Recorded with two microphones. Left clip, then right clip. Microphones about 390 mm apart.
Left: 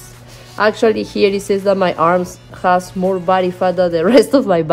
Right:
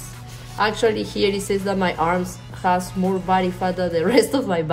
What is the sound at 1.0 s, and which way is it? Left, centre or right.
A woman's voice, left.